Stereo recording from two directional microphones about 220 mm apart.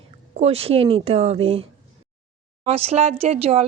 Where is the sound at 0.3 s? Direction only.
25° right (ahead or behind).